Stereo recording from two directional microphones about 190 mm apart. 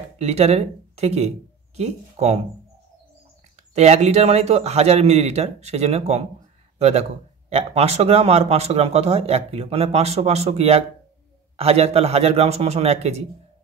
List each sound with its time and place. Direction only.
0.2 s a man's voice: 35° right (ahead or behind)
3.7 s a man's voice: 35° right (ahead or behind)